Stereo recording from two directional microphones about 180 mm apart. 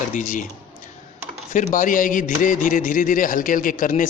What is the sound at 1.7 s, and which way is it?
Speech, 45° left (ahead or behind).